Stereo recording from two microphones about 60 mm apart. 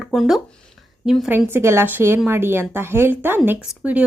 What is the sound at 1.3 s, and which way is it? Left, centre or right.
Speech, right.